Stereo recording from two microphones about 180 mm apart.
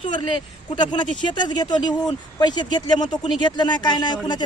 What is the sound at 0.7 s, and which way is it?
Speech, 25° left (ahead or behind).